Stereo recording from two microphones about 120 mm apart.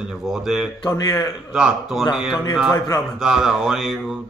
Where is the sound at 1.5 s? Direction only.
5° right (ahead or behind).